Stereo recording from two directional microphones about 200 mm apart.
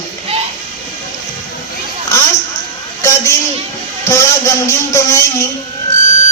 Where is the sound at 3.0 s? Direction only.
15° left (ahead or behind).